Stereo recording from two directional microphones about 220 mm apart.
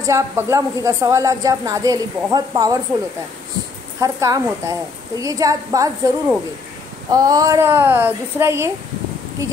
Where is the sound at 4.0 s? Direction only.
15° right (ahead or behind).